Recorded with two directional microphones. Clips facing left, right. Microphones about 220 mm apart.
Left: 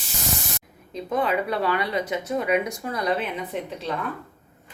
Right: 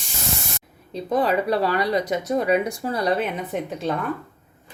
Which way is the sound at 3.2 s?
45° right (ahead or behind).